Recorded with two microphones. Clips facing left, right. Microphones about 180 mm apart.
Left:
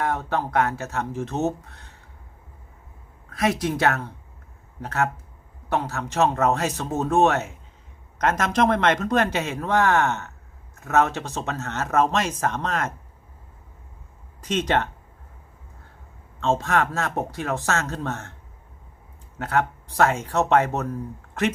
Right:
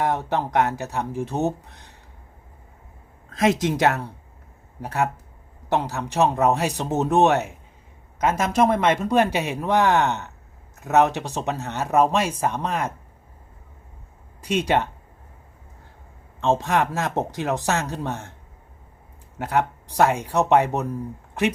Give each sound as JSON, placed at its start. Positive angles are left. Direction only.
{"t": 0.0, "sound": "a man's voice", "side_deg": -20}
{"t": 3.2, "sound": "a man's voice", "side_deg": -25}
{"t": 14.4, "sound": "a man's voice", "side_deg": -10}
{"t": 16.4, "sound": "a man's voice", "side_deg": -15}
{"t": 19.4, "sound": "a man's voice", "side_deg": -15}